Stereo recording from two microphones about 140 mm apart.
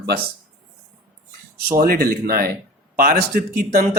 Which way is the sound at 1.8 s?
90° right.